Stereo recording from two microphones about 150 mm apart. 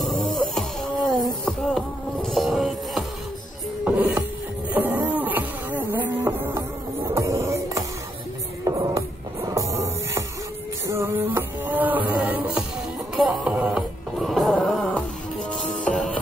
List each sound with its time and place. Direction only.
0.0 s music: centre (ahead or behind)
4.7 s a sound: 10° right (ahead or behind)
7.1 s music: 20° right (ahead or behind); by 16.1 s 5° left (ahead or behind)